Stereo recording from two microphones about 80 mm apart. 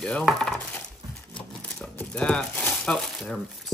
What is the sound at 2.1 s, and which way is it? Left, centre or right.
Speech, centre.